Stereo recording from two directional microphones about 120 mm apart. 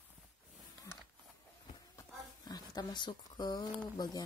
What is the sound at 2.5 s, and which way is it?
Speech, 35° left (ahead or behind).